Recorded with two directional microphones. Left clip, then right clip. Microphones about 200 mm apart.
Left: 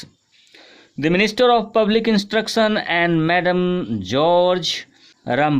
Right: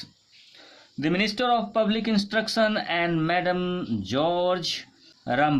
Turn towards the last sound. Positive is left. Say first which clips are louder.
# left 5 dB
turn(degrees=45)  # may be behind; listen again after turning